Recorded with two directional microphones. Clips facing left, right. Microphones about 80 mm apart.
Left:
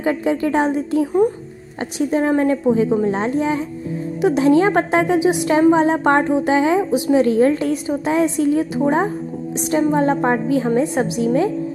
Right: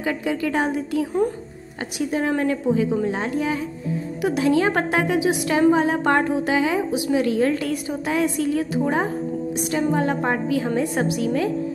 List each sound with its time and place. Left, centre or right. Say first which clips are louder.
0.0 s a woman's voice: left 5 dB; left